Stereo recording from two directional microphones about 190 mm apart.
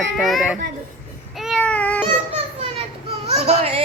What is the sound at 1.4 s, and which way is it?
Baby cry, centre (ahead or behind).